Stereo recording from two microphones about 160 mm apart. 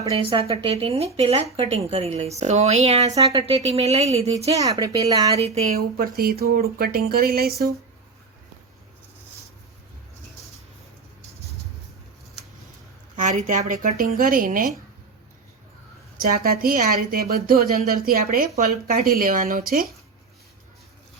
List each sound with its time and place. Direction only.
0.1 s speech: 35° right (ahead or behind)
4.5 s speech: 20° right (ahead or behind)
6.0 s a woman's voice: 70° right (ahead or behind)
13.1 s speech: 50° right (ahead or behind)
16.1 s a woman's voice: 70° right (ahead or behind)